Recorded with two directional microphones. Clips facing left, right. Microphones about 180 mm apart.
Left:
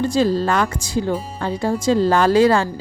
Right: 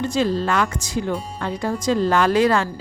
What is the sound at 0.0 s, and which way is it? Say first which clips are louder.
Speech: left 3 dB; 35° left (ahead or behind).